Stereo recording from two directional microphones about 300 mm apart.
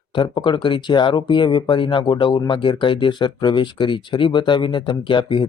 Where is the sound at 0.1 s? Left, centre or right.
Centre.